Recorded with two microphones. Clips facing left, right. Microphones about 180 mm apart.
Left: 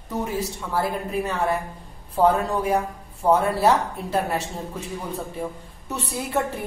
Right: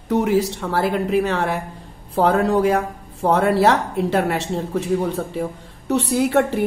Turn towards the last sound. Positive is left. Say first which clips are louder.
# right 8 dB
turn(degrees=-75)  # may be behind; listen again after turning